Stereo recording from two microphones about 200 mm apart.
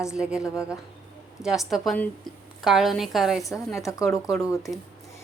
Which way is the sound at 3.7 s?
15° left (ahead or behind).